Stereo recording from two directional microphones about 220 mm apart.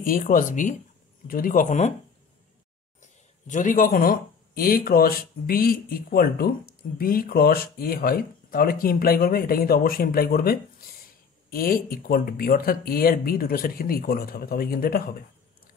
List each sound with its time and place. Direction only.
0.0 s speech: 40° left (ahead or behind)
3.0 s speech: 35° left (ahead or behind)